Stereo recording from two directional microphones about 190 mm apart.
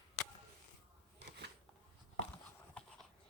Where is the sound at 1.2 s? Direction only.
65° right (ahead or behind).